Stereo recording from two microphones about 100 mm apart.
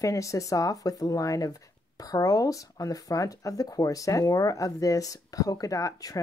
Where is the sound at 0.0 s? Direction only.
35° left (ahead or behind).